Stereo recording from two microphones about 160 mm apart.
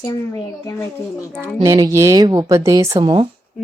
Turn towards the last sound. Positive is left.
turn(degrees=-30)  # may be behind; listen again after turning